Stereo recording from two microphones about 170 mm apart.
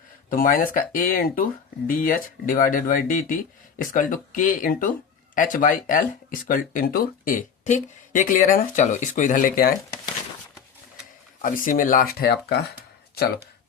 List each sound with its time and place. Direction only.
0.3 s speech: 55° left (ahead or behind)
11.4 s speech: 55° left (ahead or behind); by 12.5 s 75° left (ahead or behind)